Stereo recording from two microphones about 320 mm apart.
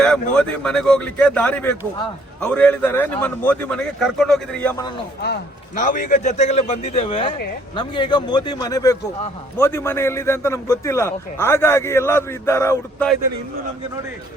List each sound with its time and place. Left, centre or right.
0.0 s speech: centre
5.2 s a man's voice: left; by 13.1 s centre